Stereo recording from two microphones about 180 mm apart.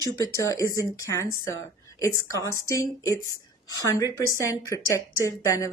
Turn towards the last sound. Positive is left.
turn(degrees=15)  # may be behind; listen again after turning